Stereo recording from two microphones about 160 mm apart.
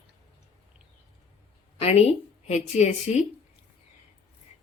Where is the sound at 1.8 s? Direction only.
40° left (ahead or behind).